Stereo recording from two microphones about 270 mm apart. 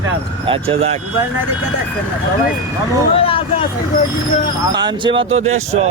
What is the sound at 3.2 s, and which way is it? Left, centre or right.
Vehicle, centre.